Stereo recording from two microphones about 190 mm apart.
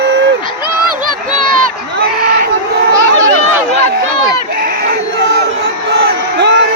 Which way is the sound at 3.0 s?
15° right (ahead or behind).